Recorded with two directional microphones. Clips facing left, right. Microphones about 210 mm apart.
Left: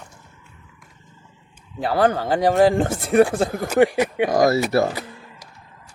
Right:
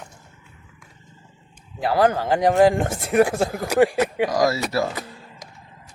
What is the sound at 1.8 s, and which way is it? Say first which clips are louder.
Speech: even; 30° left (ahead or behind).